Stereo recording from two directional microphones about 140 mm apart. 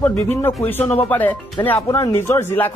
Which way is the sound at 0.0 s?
15° left (ahead or behind).